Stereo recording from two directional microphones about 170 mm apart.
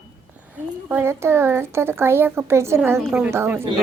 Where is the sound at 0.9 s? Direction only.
15° right (ahead or behind).